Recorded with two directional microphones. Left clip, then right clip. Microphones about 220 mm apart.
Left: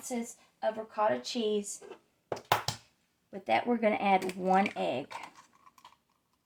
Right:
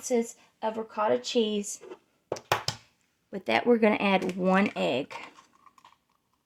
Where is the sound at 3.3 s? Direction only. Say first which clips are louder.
Right 5 dB; 50° right (ahead or behind).